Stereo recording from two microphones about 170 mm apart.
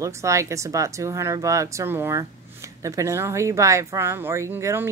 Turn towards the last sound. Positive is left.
turn(degrees=-15)  # may be behind; listen again after turning